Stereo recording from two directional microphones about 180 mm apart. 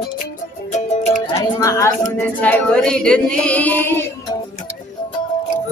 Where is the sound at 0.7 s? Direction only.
40° left (ahead or behind).